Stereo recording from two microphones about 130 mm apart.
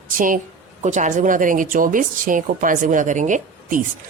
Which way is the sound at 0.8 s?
70° right (ahead or behind).